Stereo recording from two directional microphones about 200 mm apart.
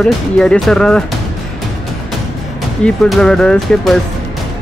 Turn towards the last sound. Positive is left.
turn(degrees=0)  # may be behind; listen again after turning